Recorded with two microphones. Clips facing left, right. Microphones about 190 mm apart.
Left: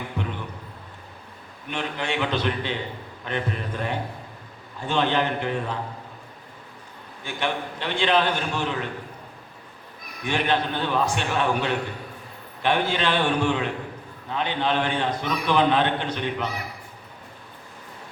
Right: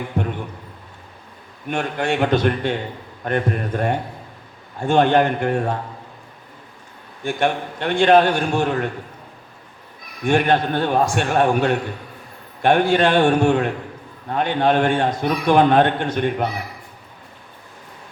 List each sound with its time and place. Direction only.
0.2 s a sound: 45° right (ahead or behind)
1.7 s a man's voice: 50° right (ahead or behind)
7.3 s a man's voice: 50° right (ahead or behind)
10.2 s a man's voice: 50° right (ahead or behind)